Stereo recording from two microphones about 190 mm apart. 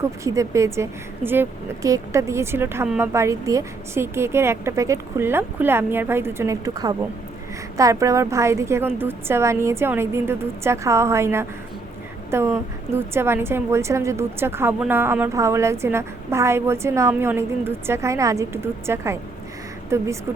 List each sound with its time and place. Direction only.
0.0 s speech: 15° right (ahead or behind)